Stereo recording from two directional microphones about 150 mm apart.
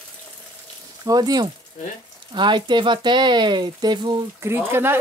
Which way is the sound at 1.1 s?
25° right (ahead or behind).